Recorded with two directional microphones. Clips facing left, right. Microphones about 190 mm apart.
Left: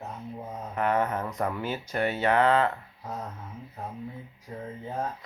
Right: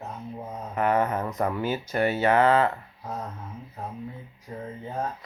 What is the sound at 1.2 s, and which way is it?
Speech, 20° right (ahead or behind).